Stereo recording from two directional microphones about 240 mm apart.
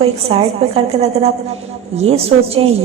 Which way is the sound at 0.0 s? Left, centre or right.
Right.